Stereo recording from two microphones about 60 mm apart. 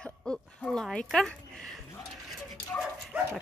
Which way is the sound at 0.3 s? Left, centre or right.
Centre.